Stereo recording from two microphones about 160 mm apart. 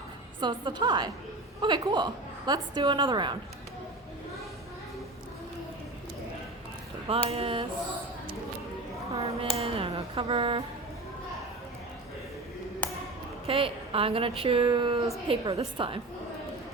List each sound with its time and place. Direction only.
0.3 s a woman's voice: 30° right (ahead or behind)
7.1 s speech: 35° right (ahead or behind)
9.1 s speech: 40° right (ahead or behind)
13.5 s speech: 35° right (ahead or behind)